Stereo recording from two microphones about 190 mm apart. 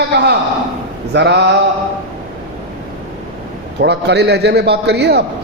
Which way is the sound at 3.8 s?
65° right (ahead or behind).